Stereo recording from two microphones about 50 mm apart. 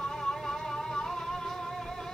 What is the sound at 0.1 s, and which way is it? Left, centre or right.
Music, centre.